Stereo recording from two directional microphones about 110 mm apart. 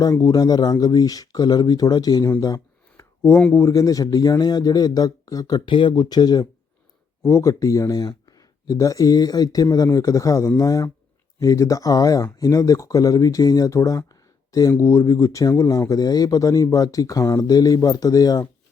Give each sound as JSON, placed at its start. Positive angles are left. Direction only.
{"t": 0.0, "sound": "speech", "side_deg": 30}
{"t": 3.0, "sound": "a sound", "side_deg": 25}
{"t": 3.5, "sound": "speech", "side_deg": 30}